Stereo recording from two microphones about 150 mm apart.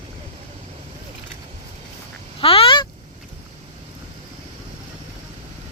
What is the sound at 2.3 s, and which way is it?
Honk, 40° left (ahead or behind).